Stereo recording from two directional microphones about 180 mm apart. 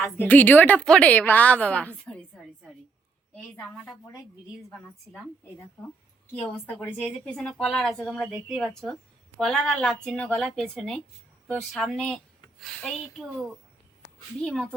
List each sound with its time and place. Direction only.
0.0 s a woman's voice: 10° left (ahead or behind)
6.7 s a woman's voice: 5° left (ahead or behind)